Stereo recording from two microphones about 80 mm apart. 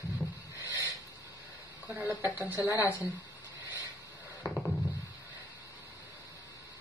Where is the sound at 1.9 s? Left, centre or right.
Right.